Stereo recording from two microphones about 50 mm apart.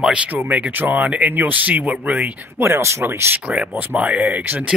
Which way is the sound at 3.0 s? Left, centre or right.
Right.